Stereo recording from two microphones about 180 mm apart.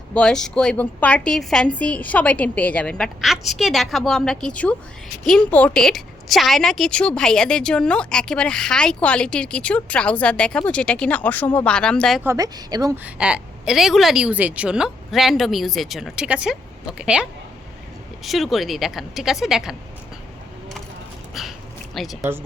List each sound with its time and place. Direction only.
0.1 s a woman's voice: 5° left (ahead or behind)
12.2 s a woman's voice: 15° right (ahead or behind)
13.1 s a woman's voice: 5° right (ahead or behind)
21.9 s a woman's voice: centre (ahead or behind)